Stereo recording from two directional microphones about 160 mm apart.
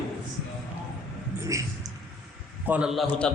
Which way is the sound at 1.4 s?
20° right (ahead or behind).